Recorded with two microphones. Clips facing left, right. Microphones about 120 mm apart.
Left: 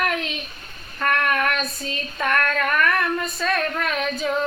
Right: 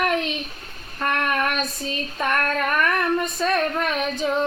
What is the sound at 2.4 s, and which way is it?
Female singing, 25° right (ahead or behind).